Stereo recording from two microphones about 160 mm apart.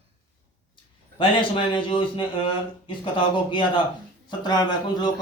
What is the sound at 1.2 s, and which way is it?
A man's voice, 35° left (ahead or behind).